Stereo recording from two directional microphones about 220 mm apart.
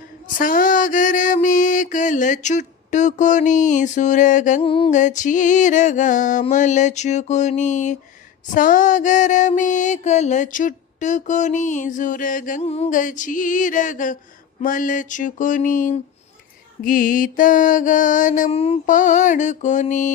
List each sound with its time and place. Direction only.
0.4 s mantra: 40° left (ahead or behind)